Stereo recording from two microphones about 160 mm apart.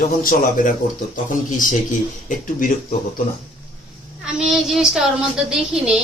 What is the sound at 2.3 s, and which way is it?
Speech, 55° left (ahead or behind).